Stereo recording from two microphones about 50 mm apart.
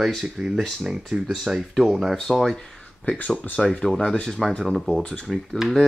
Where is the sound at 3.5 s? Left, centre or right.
Centre.